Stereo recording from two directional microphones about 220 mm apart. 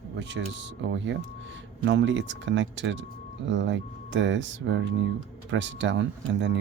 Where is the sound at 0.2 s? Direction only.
55° right (ahead or behind).